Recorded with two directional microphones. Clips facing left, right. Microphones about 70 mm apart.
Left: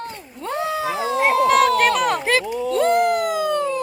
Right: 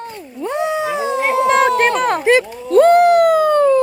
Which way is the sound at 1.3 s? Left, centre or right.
Right.